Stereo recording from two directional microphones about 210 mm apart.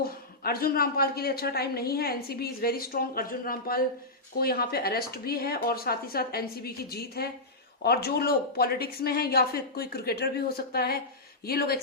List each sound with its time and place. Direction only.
0.0 s a woman's voice: 45° left (ahead or behind)